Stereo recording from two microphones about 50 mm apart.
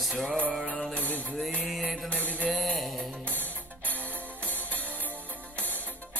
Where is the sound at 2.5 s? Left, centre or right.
Centre.